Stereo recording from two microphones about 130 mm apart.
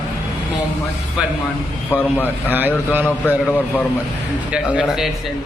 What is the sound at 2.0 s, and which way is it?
Speech, 15° left (ahead or behind).